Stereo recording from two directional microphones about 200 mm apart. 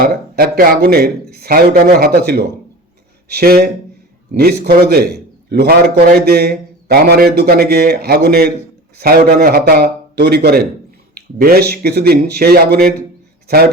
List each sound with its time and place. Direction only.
0.0 s a man's voice: 50° right (ahead or behind)